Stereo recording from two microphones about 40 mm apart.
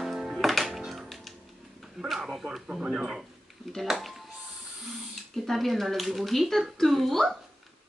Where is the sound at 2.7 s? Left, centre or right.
Right.